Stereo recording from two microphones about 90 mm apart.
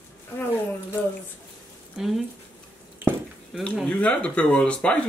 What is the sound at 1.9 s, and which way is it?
Speech, centre (ahead or behind).